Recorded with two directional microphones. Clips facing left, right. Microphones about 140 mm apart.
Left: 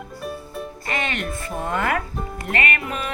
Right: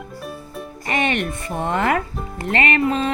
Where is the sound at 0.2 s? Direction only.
Centre (ahead or behind).